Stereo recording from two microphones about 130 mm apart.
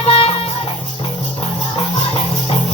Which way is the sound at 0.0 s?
50° left (ahead or behind).